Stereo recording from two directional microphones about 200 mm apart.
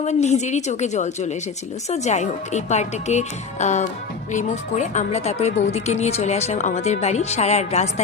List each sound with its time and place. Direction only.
0.0 s speech: 35° left (ahead or behind)